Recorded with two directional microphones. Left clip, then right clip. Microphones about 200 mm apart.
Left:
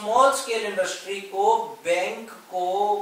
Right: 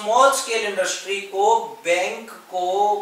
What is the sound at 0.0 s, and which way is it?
Speech, 20° left (ahead or behind).